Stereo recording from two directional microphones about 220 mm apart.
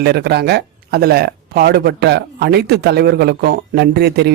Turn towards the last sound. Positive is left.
turn(degrees=-50)  # may be behind; listen again after turning